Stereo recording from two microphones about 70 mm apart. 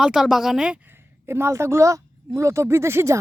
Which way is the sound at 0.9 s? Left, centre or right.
Right.